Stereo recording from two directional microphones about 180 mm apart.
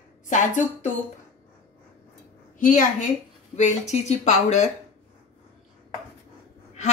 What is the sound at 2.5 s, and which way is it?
A woman's voice, 45° left (ahead or behind).